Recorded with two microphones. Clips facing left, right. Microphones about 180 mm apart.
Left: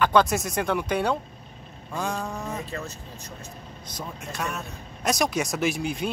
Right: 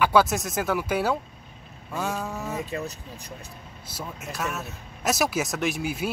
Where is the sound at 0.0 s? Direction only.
5° right (ahead or behind).